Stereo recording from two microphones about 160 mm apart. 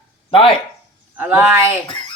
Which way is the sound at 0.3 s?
35° left (ahead or behind).